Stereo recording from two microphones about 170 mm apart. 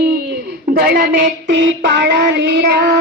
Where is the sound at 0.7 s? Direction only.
65° right (ahead or behind).